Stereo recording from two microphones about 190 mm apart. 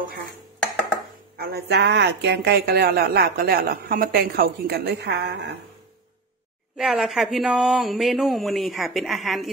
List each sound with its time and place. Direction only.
1.3 s speech: 55° right (ahead or behind)
6.8 s speech: centre (ahead or behind)